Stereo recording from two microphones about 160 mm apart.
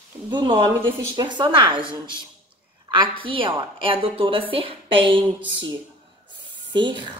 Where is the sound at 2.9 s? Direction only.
35° right (ahead or behind).